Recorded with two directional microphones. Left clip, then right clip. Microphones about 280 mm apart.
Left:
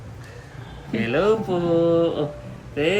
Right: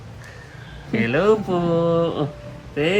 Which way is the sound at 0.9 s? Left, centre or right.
Right.